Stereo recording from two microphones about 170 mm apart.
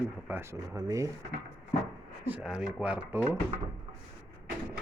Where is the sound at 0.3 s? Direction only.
15° right (ahead or behind).